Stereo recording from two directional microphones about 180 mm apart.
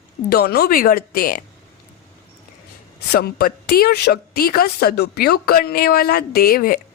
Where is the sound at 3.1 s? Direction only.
60° left (ahead or behind).